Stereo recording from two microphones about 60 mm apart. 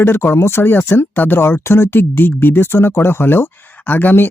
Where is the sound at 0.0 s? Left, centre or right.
Left.